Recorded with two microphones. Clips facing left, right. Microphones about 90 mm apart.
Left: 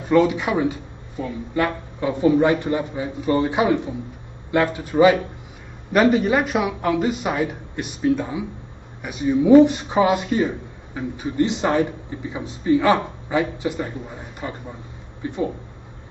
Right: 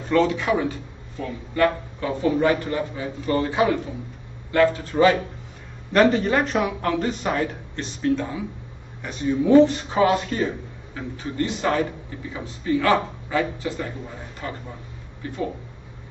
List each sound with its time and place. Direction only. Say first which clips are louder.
0.1 s speech: left 2 dB; 15° left (ahead or behind)